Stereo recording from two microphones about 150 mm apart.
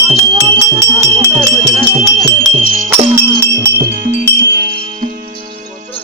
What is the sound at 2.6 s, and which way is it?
Music, 65° right (ahead or behind).